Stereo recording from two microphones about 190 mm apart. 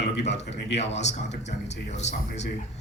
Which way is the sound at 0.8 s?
35° left (ahead or behind).